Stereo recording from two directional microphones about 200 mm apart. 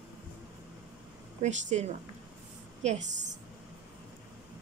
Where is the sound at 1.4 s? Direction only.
35° right (ahead or behind).